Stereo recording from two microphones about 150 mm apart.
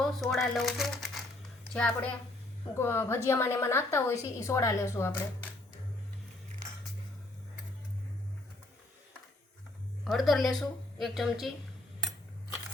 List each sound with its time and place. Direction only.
0.0 s crumpling: centre (ahead or behind)
1.7 s a woman's voice: 10° left (ahead or behind)
10.0 s speech: centre (ahead or behind)